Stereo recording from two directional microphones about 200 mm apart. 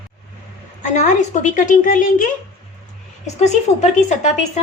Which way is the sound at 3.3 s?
35° left (ahead or behind).